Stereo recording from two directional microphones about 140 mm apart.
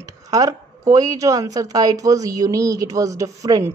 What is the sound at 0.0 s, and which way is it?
A woman's voice, 25° right (ahead or behind).